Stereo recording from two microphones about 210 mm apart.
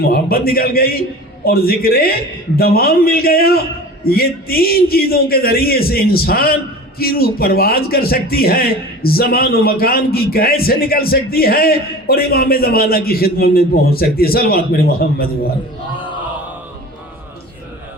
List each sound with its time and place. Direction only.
0.0 s a man's voice: 45° left (ahead or behind)